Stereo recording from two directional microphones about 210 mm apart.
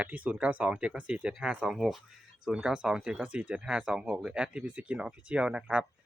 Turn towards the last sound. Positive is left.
turn(degrees=-5)  # may be behind; listen again after turning